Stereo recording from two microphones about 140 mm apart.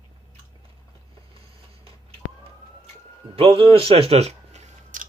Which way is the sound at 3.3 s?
40° right (ahead or behind).